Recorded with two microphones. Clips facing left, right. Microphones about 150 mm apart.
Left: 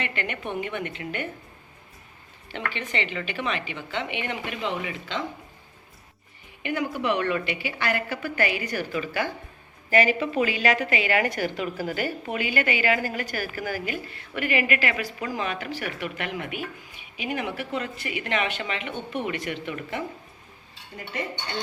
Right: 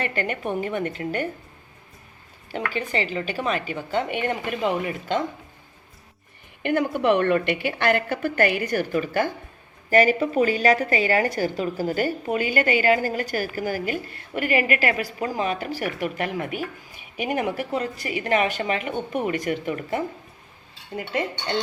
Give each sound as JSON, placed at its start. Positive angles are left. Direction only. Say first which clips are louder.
{"t": 0.0, "sound": "a woman's voice", "louder": "right 5 dB", "side_deg": -40}
{"t": 2.5, "sound": "a woman's voice", "louder": "right 5 dB", "side_deg": -40}
{"t": 6.6, "sound": "a woman's voice", "louder": "right 5 dB", "side_deg": -55}
{"t": 21.0, "sound": "speech", "louder": "right 5 dB", "side_deg": -70}